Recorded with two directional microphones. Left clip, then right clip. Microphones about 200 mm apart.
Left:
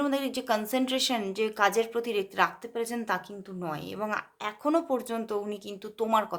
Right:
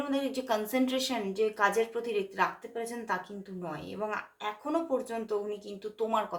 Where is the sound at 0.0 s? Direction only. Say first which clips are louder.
Left 3 dB; 45° left (ahead or behind).